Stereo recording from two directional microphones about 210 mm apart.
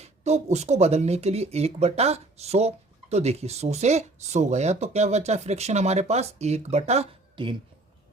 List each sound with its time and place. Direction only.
0.0 s speech: 30° right (ahead or behind)